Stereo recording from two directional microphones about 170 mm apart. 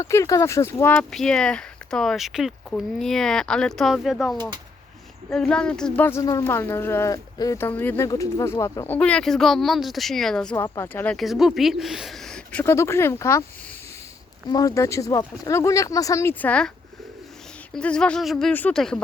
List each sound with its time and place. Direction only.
0.0 s speech: 20° left (ahead or behind)
9.0 s speech: 5° left (ahead or behind)
10.6 s speech: 15° left (ahead or behind)
14.5 s speech: 20° left (ahead or behind)
17.7 s speech: 5° left (ahead or behind)